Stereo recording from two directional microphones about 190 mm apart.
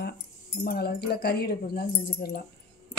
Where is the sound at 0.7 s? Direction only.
55° left (ahead or behind).